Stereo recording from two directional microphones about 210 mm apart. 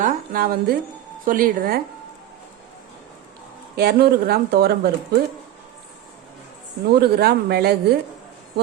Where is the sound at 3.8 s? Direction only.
50° right (ahead or behind).